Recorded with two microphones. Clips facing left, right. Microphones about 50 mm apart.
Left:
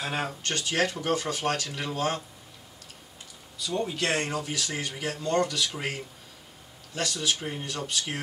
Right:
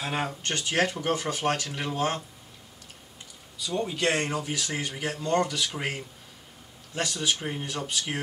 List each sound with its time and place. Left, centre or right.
0.0 s speech: centre
0.4 s speech: right
3.6 s speech: centre
7.3 s speech: centre